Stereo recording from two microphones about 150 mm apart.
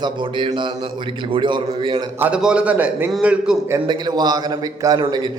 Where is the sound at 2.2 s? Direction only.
10° right (ahead or behind).